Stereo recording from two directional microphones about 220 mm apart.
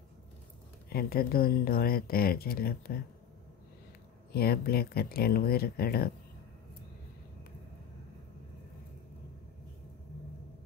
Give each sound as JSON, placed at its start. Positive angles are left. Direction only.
{"t": 0.8, "sound": "speech", "side_deg": 45}
{"t": 4.3, "sound": "speech", "side_deg": 45}